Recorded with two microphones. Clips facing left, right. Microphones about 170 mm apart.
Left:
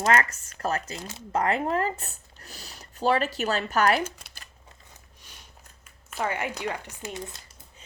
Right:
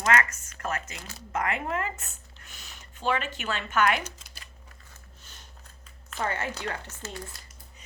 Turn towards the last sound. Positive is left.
turn(degrees=15)  # may be behind; listen again after turning